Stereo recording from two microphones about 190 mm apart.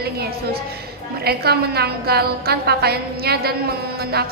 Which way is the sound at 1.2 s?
55° right (ahead or behind).